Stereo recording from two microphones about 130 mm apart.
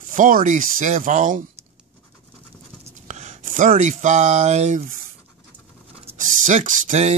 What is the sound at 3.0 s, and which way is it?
Speech, 65° right (ahead or behind).